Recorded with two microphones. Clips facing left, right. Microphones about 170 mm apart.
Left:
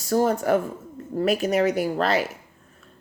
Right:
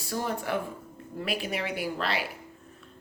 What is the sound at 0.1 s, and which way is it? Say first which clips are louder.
Speech: left 10 dB; 45° left (ahead or behind).